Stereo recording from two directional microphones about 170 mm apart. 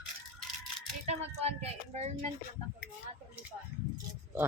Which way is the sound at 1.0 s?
40° right (ahead or behind).